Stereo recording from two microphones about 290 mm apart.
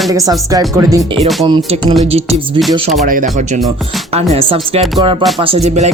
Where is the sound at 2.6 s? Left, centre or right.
Centre.